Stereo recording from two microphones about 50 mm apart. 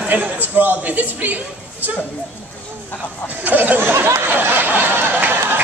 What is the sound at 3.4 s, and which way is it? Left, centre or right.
Speech, right.